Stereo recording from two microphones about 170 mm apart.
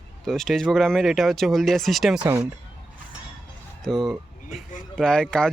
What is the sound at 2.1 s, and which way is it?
Speech, 20° right (ahead or behind).